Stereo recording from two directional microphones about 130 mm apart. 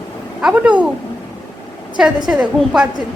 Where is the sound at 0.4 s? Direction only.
5° right (ahead or behind).